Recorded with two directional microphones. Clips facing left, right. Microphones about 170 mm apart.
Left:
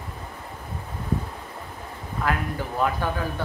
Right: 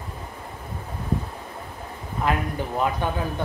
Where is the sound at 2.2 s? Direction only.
20° right (ahead or behind).